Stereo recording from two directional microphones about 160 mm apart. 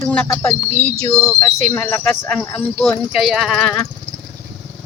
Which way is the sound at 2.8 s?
Centre (ahead or behind).